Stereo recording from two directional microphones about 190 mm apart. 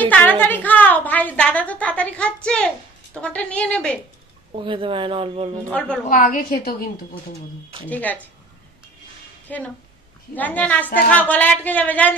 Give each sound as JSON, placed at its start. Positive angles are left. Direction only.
{"t": 0.1, "sound": "a sound", "side_deg": 10}
{"t": 3.2, "sound": "speech", "side_deg": 5}
{"t": 4.5, "sound": "speech", "side_deg": -25}
{"t": 5.7, "sound": "speech", "side_deg": 5}
{"t": 6.0, "sound": "a woman's voice", "side_deg": 45}
{"t": 7.9, "sound": "speech", "side_deg": 10}
{"t": 9.5, "sound": "speech", "side_deg": 5}